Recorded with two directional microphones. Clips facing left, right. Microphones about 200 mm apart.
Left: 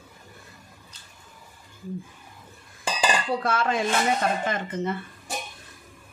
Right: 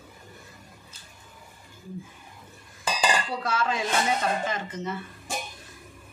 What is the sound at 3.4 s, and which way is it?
Speech, 55° left (ahead or behind).